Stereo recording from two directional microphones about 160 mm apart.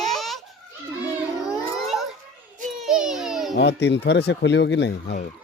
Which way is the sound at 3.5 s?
90° left.